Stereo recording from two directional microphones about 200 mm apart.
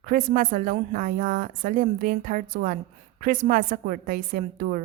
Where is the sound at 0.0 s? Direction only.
40° right (ahead or behind).